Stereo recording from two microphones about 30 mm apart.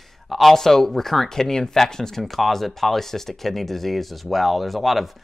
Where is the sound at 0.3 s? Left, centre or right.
Centre.